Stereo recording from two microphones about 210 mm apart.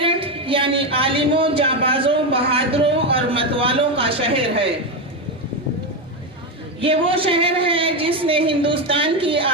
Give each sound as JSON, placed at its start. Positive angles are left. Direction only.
{"t": 0.0, "sound": "speech", "side_deg": -25}
{"t": 6.7, "sound": "speech", "side_deg": -25}